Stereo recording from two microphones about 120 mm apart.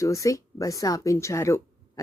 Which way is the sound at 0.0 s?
25° left (ahead or behind).